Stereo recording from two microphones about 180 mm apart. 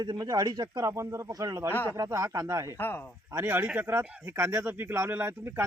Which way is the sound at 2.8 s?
10° left (ahead or behind).